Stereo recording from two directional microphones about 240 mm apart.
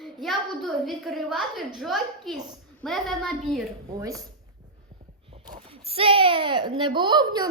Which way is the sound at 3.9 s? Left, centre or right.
Centre.